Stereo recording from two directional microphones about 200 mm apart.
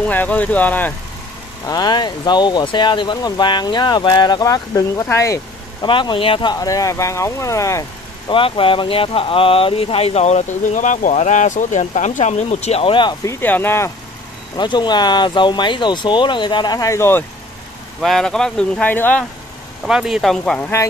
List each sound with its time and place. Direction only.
0.0 s speech: 10° left (ahead or behind)
1.7 s speech: 20° left (ahead or behind)
8.3 s speech: 25° left (ahead or behind)
18.0 s speech: centre (ahead or behind)
19.8 s speech: centre (ahead or behind)